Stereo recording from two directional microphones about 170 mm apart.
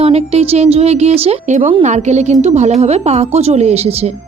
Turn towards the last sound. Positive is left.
turn(degrees=-40)  # may be behind; listen again after turning